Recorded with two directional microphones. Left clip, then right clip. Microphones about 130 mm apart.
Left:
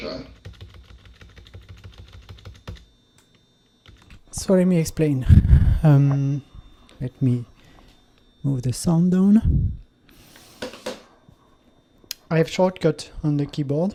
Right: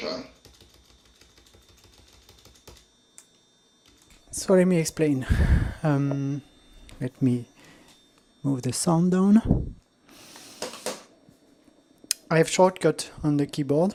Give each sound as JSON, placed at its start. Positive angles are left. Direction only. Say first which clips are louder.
{"t": 0.0, "sound": "typing", "louder": "even", "side_deg": -40}
{"t": 4.3, "sound": "speech", "louder": "left 1 dB", "side_deg": -35}
{"t": 10.1, "sound": "a sound", "louder": "right 2 dB", "side_deg": -40}
{"t": 12.0, "sound": "speech", "louder": "even", "side_deg": -45}